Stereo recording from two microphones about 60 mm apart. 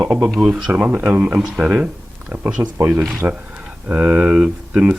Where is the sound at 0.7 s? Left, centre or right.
Right.